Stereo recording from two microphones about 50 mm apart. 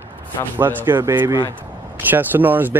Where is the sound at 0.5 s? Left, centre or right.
Right.